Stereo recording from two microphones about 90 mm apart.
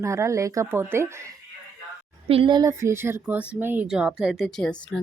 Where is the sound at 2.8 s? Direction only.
30° right (ahead or behind).